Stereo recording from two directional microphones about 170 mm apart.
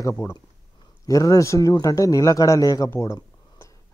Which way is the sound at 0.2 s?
20° left (ahead or behind).